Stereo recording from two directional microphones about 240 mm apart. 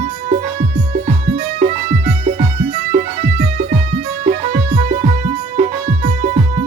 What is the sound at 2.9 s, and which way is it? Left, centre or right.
Music, right.